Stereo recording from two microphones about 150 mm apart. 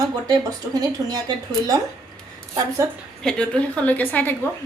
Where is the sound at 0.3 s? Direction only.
25° right (ahead or behind).